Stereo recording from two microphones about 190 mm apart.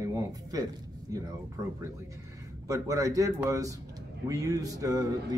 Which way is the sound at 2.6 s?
15° right (ahead or behind).